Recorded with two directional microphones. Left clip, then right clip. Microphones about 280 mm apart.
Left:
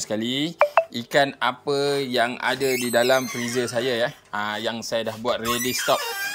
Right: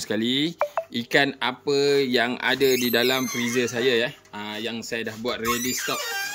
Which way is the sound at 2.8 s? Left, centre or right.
Centre.